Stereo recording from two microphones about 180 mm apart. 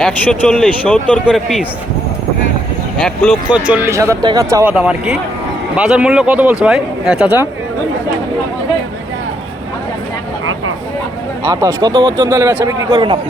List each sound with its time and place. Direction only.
0.0 s speech: 5° left (ahead or behind)
3.0 s speech: centre (ahead or behind)
3.7 s speech: 15° right (ahead or behind)
4.7 s speech: 5° right (ahead or behind)
11.4 s speech: 20° right (ahead or behind)
12.9 s speech: 30° right (ahead or behind)